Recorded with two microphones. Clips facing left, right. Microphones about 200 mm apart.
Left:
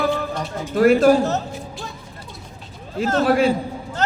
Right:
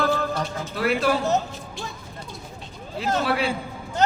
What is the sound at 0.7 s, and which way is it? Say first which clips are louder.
Speech: left 10 dB; 45° left (ahead or behind).